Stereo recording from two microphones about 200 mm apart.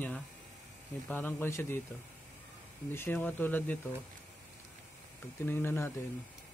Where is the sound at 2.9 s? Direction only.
10° left (ahead or behind).